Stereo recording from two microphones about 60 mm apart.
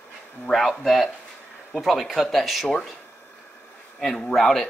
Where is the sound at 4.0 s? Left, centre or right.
Centre.